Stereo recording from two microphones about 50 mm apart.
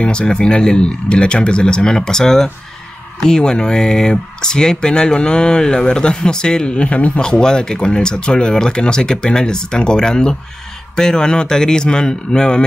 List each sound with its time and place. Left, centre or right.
0.0 s speech: centre
7.2 s speech: centre